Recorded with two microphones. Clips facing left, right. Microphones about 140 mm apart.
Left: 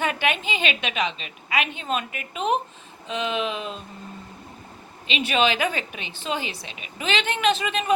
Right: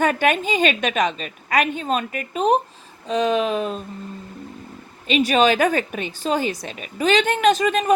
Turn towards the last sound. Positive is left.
turn(degrees=-45)  # may be behind; listen again after turning